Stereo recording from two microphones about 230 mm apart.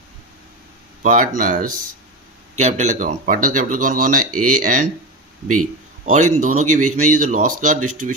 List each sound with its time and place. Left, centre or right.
1.0 s speech: right
4.4 s speech: right
4.6 s speech: right
6.1 s speech: right